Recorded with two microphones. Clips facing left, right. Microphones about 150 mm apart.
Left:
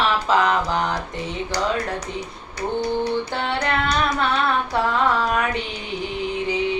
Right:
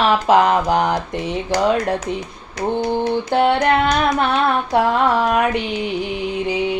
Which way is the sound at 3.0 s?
50° right (ahead or behind).